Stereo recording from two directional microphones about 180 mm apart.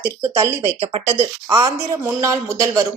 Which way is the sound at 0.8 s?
35° right (ahead or behind).